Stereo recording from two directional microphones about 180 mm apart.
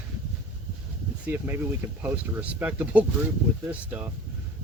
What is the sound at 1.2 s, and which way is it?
Speech, 10° right (ahead or behind).